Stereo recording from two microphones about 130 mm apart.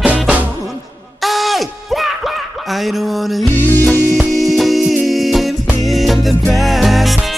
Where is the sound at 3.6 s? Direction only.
15° left (ahead or behind).